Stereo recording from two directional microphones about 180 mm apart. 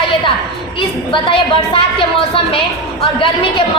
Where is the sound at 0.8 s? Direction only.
30° left (ahead or behind).